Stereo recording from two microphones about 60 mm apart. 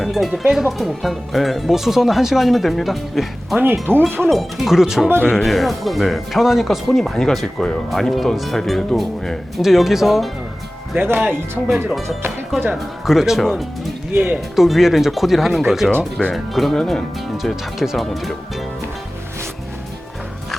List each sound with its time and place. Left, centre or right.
0.0 s speech: centre
3.9 s speech: right
4.3 s speech: centre
9.6 s speech: centre
10.9 s speech: right
12.7 s speech: centre
13.4 s speech: centre
14.1 s speech: right
14.3 s speech: centre
17.3 s speech: centre